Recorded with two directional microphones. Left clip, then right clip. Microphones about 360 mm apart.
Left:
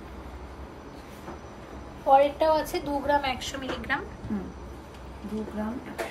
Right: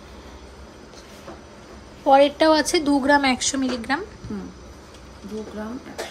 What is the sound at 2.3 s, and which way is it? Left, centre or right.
A woman's voice, right.